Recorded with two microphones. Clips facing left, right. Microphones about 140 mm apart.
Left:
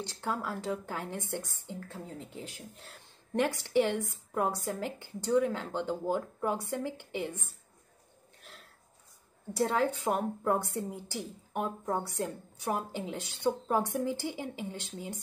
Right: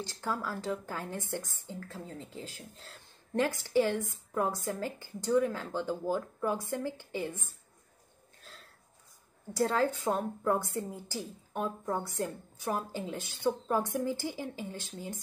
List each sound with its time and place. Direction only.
0.0 s a woman's voice: 20° left (ahead or behind)
9.7 s a woman's voice: 15° left (ahead or behind)